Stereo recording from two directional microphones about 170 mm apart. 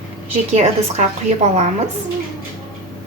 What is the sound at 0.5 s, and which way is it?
Speech, 40° right (ahead or behind).